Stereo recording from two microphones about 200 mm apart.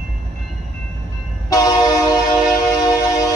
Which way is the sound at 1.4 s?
15° left (ahead or behind).